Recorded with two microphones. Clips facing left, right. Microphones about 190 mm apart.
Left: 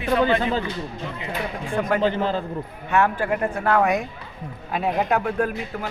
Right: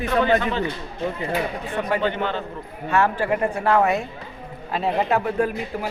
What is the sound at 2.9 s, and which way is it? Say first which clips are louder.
A man's voice: right 1 dB; 5° right (ahead or behind).